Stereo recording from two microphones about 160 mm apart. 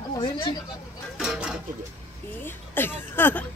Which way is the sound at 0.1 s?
30° left (ahead or behind).